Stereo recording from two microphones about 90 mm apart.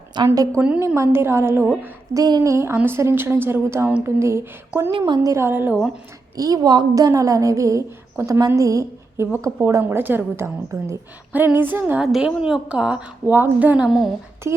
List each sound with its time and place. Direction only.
0.1 s a woman's voice: 60° right (ahead or behind)
0.6 s a woman's voice: 20° right (ahead or behind)
2.1 s speech: 50° right (ahead or behind)
2.4 s a woman's voice: 35° right (ahead or behind)
4.9 s a woman's voice: 65° right (ahead or behind)
5.2 s a woman's voice: 35° right (ahead or behind)
6.3 s a woman's voice: 40° right (ahead or behind)
9.8 s a woman's voice: 20° right (ahead or behind)
11.3 s a woman's voice: 20° right (ahead or behind)
12.0 s a woman's voice: 5° right (ahead or behind)
13.8 s speech: centre (ahead or behind)
14.5 s a woman's voice: 25° right (ahead or behind)